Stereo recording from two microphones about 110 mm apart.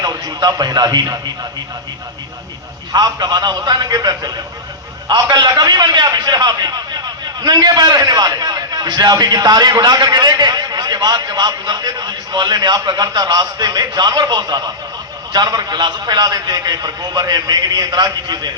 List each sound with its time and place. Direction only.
0.0 s a man's voice: 35° right (ahead or behind)
2.9 s a man's voice: 40° right (ahead or behind)